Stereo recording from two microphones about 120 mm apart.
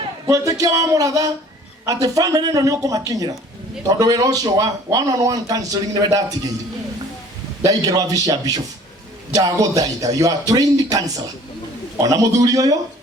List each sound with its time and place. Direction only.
0.3 s a man's voice: 25° right (ahead or behind)
7.6 s a man's voice: 30° right (ahead or behind)